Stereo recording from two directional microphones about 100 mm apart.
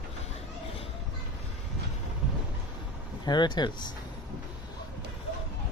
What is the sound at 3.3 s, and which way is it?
Speech, 45° left (ahead or behind).